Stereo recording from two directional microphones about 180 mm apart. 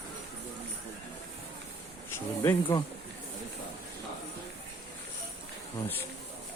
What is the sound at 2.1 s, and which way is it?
Speech, 15° left (ahead or behind).